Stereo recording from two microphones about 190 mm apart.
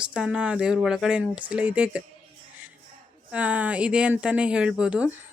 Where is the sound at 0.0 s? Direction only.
5° right (ahead or behind).